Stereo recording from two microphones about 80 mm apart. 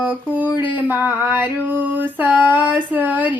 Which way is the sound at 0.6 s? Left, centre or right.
Right.